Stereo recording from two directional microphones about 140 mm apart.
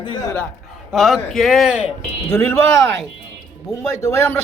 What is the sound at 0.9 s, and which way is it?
Speech, centre (ahead or behind).